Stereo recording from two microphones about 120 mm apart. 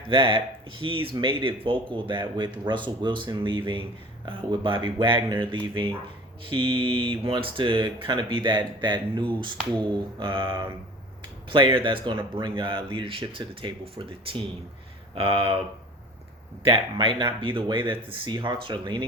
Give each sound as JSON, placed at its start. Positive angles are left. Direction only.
{"t": 0.1, "sound": "speech", "side_deg": -45}
{"t": 16.6, "sound": "speech", "side_deg": -45}